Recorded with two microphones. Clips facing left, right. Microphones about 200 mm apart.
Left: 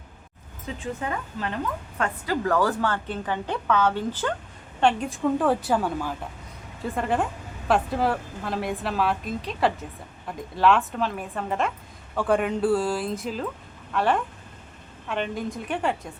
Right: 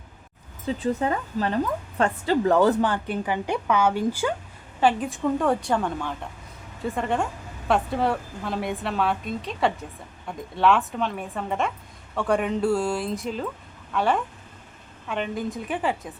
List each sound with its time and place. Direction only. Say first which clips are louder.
0.8 s a woman's voice: right 5 dB; 35° right (ahead or behind); by 16.1 s centre (ahead or behind)